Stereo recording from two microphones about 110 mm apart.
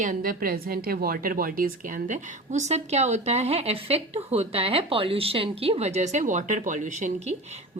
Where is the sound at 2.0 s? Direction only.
90° right.